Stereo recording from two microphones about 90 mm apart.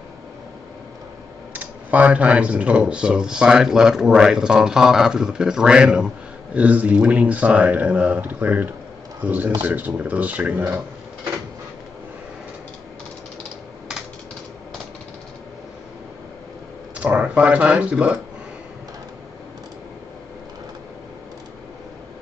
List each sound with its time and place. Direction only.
1.5 s speech: 15° right (ahead or behind)
16.9 s speech: 15° right (ahead or behind)